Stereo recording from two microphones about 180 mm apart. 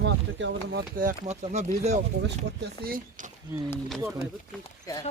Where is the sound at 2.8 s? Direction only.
55° right (ahead or behind).